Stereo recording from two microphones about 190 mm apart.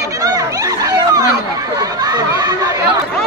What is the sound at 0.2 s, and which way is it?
Chatter, 20° right (ahead or behind).